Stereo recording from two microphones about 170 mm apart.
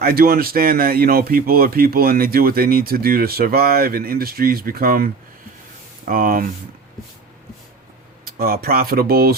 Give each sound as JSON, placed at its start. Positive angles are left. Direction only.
{"t": 0.0, "sound": "speech", "side_deg": -60}
{"t": 6.1, "sound": "speech", "side_deg": -55}
{"t": 8.2, "sound": "speech", "side_deg": -65}